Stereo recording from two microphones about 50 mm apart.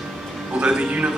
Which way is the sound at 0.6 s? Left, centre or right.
Right.